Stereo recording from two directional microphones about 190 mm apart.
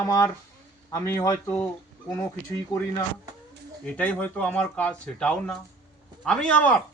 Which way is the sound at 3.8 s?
5° left (ahead or behind).